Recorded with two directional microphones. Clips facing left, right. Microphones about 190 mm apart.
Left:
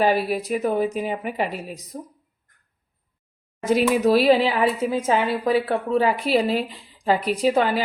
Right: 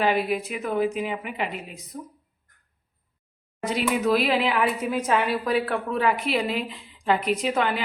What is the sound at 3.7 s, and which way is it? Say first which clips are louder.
Speech: left 5 dB; 40° left (ahead or behind).